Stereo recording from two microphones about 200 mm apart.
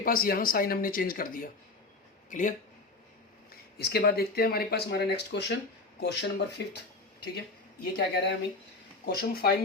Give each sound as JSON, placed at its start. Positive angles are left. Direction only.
{"t": 0.0, "sound": "a man's voice", "side_deg": 45}
{"t": 3.8, "sound": "speech", "side_deg": 55}
{"t": 7.9, "sound": "speech", "side_deg": 55}